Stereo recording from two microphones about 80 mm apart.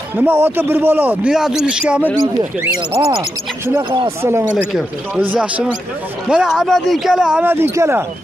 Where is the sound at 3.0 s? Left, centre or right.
Right.